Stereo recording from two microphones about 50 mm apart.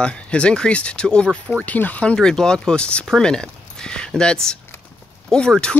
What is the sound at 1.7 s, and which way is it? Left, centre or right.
Speech, left.